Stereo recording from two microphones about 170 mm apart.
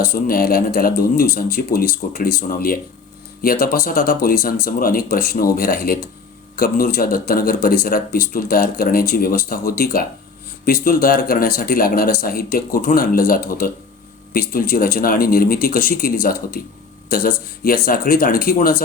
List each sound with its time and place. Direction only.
0.0 s speech: 60° left (ahead or behind)